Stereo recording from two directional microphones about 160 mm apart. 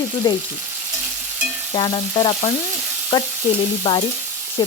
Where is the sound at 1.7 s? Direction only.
30° left (ahead or behind).